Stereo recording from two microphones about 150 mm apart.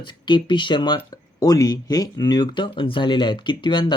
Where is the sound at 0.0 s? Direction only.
30° left (ahead or behind).